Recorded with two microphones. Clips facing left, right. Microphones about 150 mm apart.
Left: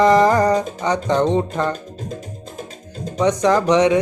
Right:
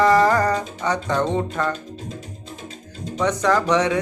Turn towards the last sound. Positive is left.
turn(degrees=20)  # may be behind; listen again after turning